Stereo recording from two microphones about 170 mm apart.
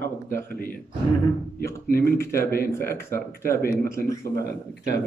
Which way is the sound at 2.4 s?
60° left (ahead or behind).